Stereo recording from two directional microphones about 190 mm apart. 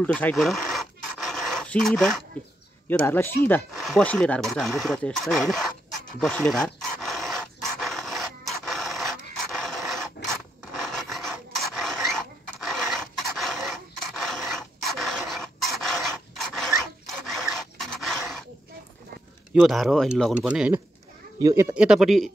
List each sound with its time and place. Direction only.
0.0 s a sound: 5° left (ahead or behind)
2.9 s speech: 10° left (ahead or behind)
3.7 s speech: centre (ahead or behind)
6.1 s dog: centre (ahead or behind)
10.6 s filing: centre (ahead or behind)
17.0 s a sound: centre (ahead or behind)
19.5 s speech: centre (ahead or behind)
21.4 s speech: 15° right (ahead or behind)
21.7 s speech: 5° right (ahead or behind)